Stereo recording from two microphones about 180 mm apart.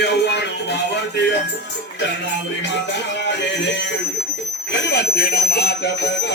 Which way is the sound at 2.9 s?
75° left (ahead or behind).